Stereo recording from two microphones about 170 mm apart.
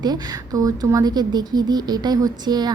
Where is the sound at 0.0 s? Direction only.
25° right (ahead or behind).